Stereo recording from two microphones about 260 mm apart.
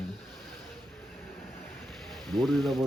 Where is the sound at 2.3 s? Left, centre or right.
Centre.